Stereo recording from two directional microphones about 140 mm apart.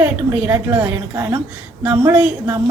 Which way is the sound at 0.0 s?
10° right (ahead or behind).